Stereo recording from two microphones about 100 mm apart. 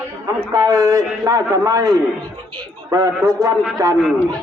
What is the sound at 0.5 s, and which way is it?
A man's voice, 35° right (ahead or behind).